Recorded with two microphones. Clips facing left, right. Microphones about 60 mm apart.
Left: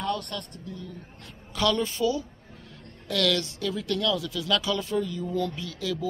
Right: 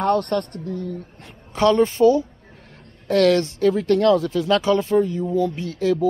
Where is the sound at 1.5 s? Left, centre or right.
Right.